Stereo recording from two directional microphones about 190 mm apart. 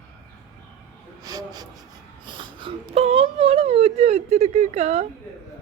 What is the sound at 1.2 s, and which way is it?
Speech, 20° right (ahead or behind).